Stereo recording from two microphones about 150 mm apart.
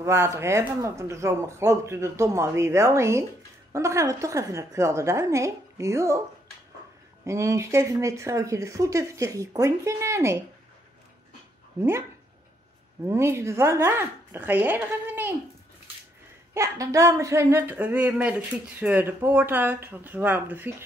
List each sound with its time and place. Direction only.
0.0 s speech: 15° right (ahead or behind)
7.2 s speech: 20° right (ahead or behind)
13.0 s speech: 20° right (ahead or behind)
16.5 s speech: 20° right (ahead or behind)